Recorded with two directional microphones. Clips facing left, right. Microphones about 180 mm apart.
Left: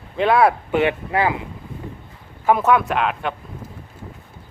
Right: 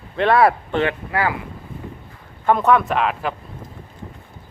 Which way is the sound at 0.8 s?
20° left (ahead or behind).